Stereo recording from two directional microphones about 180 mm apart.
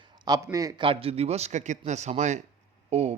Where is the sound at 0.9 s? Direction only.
30° right (ahead or behind).